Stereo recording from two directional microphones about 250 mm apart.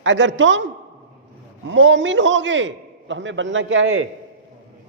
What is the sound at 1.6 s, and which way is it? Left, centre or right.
Speech, right.